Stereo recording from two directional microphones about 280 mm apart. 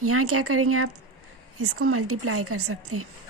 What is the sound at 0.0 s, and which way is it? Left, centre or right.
A woman's voice, right.